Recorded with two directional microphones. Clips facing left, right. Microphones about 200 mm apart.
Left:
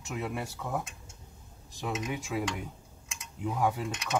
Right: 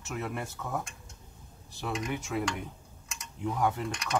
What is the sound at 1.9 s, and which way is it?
Speech, centre (ahead or behind).